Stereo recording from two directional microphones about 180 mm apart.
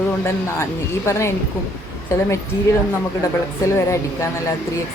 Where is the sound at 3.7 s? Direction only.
15° left (ahead or behind).